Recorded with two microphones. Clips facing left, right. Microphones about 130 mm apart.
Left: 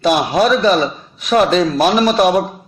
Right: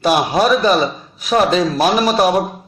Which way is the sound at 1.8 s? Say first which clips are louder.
Left 1 dB; 35° right (ahead or behind).